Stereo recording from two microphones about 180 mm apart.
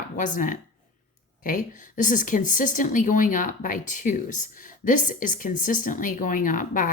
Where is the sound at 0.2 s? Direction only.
45° left (ahead or behind).